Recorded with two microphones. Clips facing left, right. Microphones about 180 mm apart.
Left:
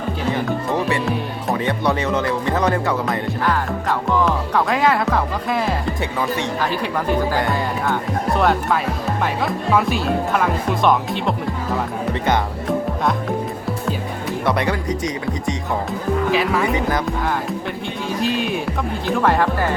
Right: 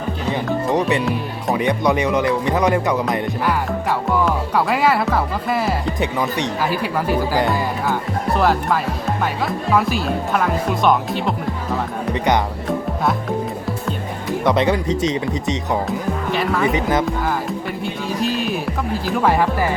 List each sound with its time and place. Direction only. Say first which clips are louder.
1.0 s music: right 1 dB; centre (ahead or behind)
1.5 s speech: right 3 dB; 15° right (ahead or behind)
6.0 s speech: right 2 dB; 20° right (ahead or behind)
6.6 s speech: right 1 dB; 5° right (ahead or behind)
14.4 s speech: right 4 dB; 20° right (ahead or behind)
15.9 s speech: left 2 dB; centre (ahead or behind)
18.2 s speech: left 1 dB; centre (ahead or behind)